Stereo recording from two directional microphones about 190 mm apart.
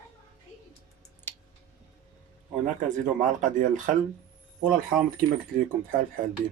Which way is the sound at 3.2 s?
45° right (ahead or behind).